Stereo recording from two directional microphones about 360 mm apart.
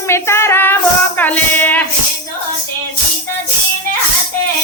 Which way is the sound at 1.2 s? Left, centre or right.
Centre.